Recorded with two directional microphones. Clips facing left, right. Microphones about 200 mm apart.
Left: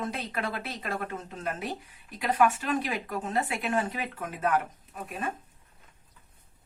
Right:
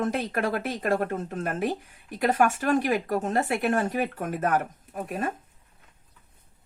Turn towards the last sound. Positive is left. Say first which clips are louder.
# right 6 dB
turn(degrees=-50)  # may be behind; listen again after turning